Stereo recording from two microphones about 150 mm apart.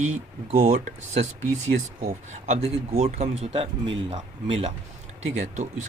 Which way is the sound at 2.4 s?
45° right (ahead or behind).